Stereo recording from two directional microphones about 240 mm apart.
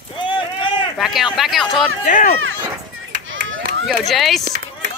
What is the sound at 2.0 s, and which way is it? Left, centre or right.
Speech, left.